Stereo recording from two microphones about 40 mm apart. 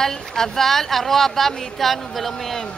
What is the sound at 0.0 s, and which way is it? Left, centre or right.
Speech, centre.